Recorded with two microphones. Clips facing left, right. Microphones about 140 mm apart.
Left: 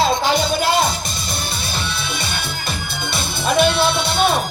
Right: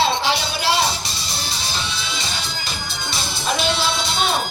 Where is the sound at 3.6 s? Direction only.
55° left (ahead or behind).